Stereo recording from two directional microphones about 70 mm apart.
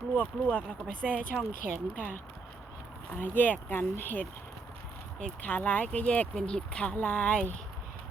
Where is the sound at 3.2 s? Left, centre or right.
Left.